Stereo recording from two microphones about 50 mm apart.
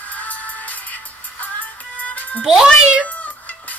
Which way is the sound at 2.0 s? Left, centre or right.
Left.